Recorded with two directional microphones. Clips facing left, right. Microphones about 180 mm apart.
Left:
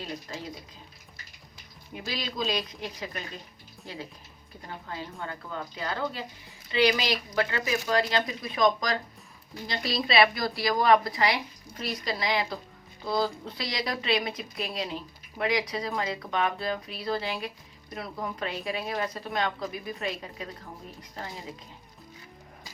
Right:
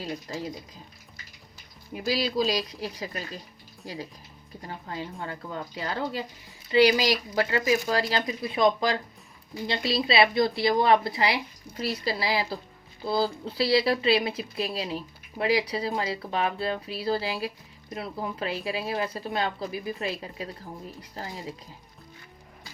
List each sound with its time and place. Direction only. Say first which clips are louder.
0.3 s speech: right 4 dB; 35° right (ahead or behind)
2.0 s speech: right 6 dB; 35° right (ahead or behind)
4.9 s speech: right 2 dB; 30° right (ahead or behind)